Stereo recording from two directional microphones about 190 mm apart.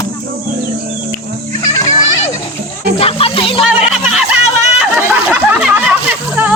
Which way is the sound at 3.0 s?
30° left (ahead or behind).